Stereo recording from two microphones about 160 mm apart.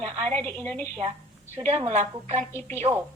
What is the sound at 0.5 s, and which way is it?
A woman's voice, 45° right (ahead or behind).